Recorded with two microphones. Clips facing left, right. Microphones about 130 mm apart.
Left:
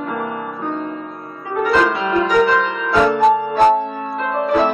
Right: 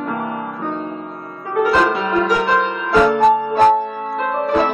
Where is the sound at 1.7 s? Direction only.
5° right (ahead or behind).